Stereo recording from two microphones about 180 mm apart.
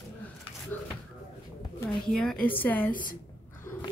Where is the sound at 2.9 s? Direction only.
50° left (ahead or behind).